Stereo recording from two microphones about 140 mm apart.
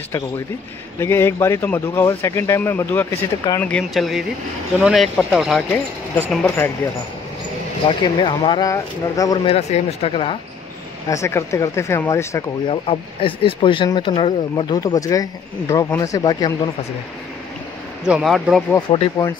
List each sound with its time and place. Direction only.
0.9 s speech: 20° left (ahead or behind)
3.6 s speech: 5° left (ahead or behind)
5.7 s speech: 15° left (ahead or behind)
8.0 s speech: 35° left (ahead or behind)
9.4 s speech: 50° left (ahead or behind)
11.1 s speech: 20° left (ahead or behind)
12.6 s speech: 40° left (ahead or behind)
18.0 s speech: 5° right (ahead or behind)
18.8 s speech: 35° left (ahead or behind)